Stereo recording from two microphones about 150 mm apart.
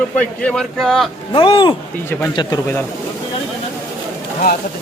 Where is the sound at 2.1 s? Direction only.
15° left (ahead or behind).